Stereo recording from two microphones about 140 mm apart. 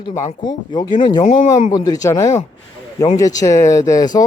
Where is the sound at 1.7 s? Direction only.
25° left (ahead or behind).